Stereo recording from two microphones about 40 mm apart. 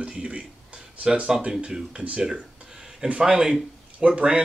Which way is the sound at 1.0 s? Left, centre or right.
Right.